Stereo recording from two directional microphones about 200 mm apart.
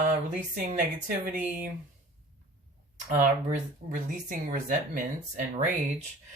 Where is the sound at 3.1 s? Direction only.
40° right (ahead or behind).